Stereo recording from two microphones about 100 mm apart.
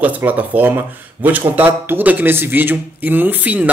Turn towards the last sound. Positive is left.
turn(degrees=-15)  # may be behind; listen again after turning